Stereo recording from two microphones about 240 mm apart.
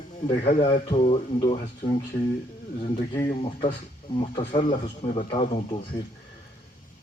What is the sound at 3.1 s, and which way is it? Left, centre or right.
A man's voice, centre.